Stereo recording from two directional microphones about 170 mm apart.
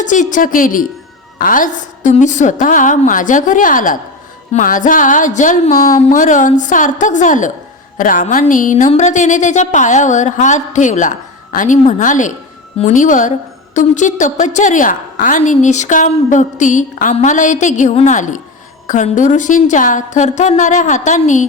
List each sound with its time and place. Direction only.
0.0 s a woman's voice: 45° left (ahead or behind)